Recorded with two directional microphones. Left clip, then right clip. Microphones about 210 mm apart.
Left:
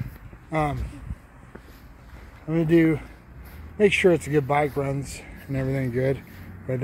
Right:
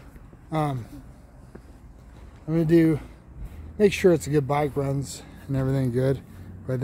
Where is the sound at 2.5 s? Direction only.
15° right (ahead or behind).